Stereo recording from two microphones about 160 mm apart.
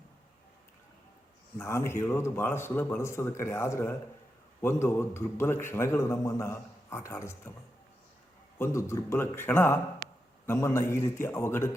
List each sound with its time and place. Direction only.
1.5 s a man's voice: 15° left (ahead or behind)
8.5 s a man's voice: 15° left (ahead or behind)